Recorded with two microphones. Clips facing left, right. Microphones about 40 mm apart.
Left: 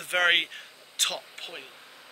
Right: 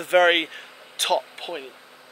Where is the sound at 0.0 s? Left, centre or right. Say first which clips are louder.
Right 6 dB; centre.